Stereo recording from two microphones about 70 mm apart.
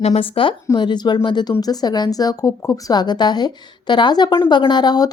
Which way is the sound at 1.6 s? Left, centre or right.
Left.